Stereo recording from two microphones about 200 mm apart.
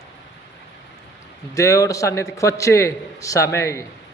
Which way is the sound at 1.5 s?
15° left (ahead or behind).